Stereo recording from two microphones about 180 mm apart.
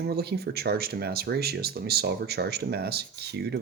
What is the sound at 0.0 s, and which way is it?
Speech, 65° right (ahead or behind).